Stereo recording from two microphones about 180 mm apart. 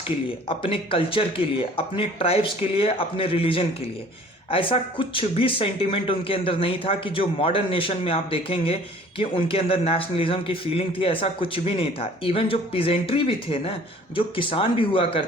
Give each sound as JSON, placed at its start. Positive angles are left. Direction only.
{"t": 0.4, "sound": "speech", "side_deg": 30}